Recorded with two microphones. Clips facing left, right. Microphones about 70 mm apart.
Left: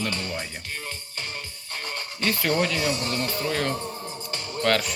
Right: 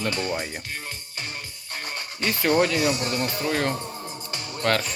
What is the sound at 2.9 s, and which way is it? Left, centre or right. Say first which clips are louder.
Speech: right 1 dB; centre.